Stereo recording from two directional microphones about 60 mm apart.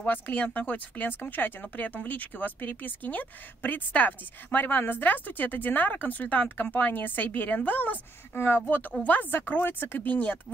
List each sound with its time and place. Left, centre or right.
0.0 s speech: left